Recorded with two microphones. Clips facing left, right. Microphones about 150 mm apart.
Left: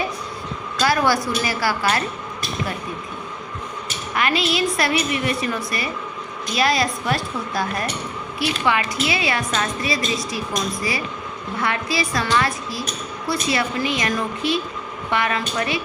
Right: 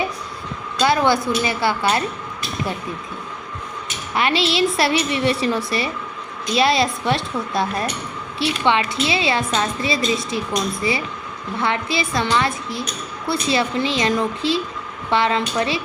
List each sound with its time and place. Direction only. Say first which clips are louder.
0.8 s a woman's voice: right 2 dB; 25° right (ahead or behind)
4.1 s a woman's voice: right 2 dB; 30° right (ahead or behind)
11.6 s a woman's voice: right 2 dB; 25° right (ahead or behind)